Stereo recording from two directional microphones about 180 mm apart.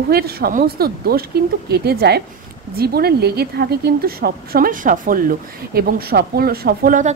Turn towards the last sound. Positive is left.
turn(degrees=-45)  # may be behind; listen again after turning